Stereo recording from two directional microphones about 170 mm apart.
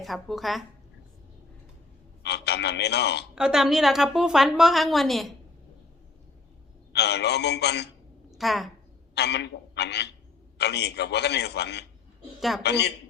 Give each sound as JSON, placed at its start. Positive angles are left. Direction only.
{"t": 0.0, "sound": "a woman's voice", "side_deg": 0}
{"t": 2.2, "sound": "speech", "side_deg": 80}
{"t": 3.3, "sound": "a woman's voice", "side_deg": -5}
{"t": 6.9, "sound": "a man's voice", "side_deg": 80}
{"t": 8.3, "sound": "a woman's voice", "side_deg": 0}
{"t": 9.1, "sound": "a man's voice", "side_deg": 85}
{"t": 12.4, "sound": "a woman's voice", "side_deg": 0}
{"t": 12.6, "sound": "a man's voice", "side_deg": 80}